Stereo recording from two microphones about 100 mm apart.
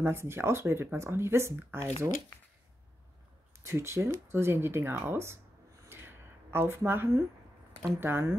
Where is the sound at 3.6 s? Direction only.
25° right (ahead or behind).